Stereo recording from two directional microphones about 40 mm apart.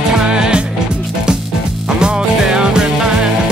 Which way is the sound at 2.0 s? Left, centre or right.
Right.